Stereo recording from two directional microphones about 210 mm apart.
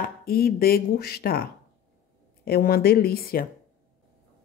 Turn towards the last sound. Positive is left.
turn(degrees=45)  # may be behind; listen again after turning